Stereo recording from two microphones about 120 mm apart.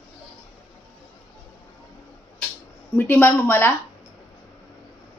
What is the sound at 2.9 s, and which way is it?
Speech, 15° left (ahead or behind).